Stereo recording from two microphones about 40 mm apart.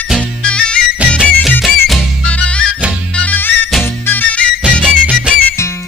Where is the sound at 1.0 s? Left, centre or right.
Right.